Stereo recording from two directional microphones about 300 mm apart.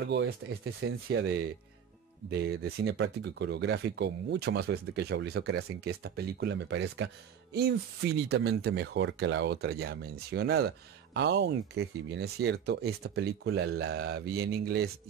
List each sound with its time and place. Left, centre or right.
0.1 s speech: right
2.8 s speech: right